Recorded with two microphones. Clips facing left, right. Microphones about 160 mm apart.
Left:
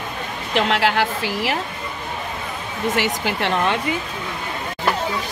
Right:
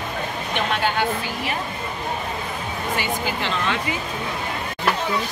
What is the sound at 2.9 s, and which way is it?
Speech, 75° left (ahead or behind).